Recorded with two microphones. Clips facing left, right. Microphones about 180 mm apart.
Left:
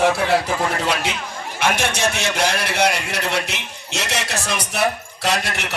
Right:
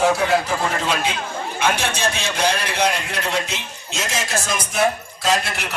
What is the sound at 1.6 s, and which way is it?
A man's voice, 70° left (ahead or behind).